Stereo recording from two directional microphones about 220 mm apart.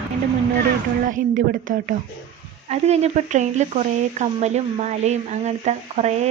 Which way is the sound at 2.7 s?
30° right (ahead or behind).